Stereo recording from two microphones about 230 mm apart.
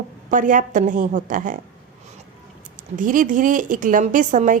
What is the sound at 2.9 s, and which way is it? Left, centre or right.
Speech, right.